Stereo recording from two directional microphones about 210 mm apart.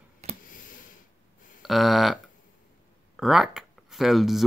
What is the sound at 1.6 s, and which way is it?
Speech, centre (ahead or behind).